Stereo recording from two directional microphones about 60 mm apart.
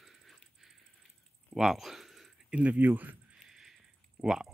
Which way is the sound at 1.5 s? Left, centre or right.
Centre.